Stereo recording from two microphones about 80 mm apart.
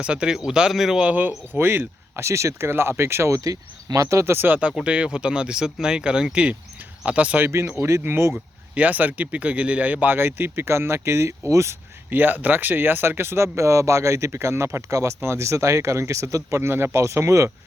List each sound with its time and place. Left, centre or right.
0.0 s speech: centre
1.0 s speech: right
7.4 s speech: right
8.7 s speech: centre; by 11.7 s right
12.1 s speech: right